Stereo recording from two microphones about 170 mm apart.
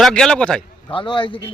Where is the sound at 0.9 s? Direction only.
30° left (ahead or behind).